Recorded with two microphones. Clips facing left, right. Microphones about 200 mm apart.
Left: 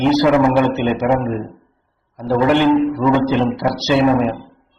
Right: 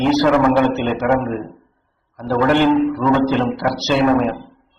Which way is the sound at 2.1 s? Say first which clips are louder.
Left 1 dB; 15° left (ahead or behind).